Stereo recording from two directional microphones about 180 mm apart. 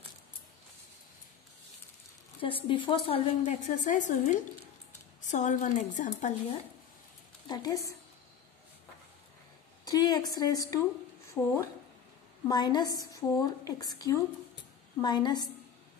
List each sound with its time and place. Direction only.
2.4 s a woman's voice: 30° left (ahead or behind)
7.4 s a woman's voice: 20° left (ahead or behind)
9.8 s a woman's voice: 20° left (ahead or behind)